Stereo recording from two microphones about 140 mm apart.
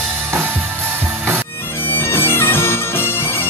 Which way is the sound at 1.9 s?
15° left (ahead or behind).